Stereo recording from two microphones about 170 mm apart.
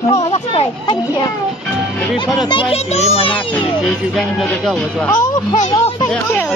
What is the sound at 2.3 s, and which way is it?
A child's voice, 25° left (ahead or behind).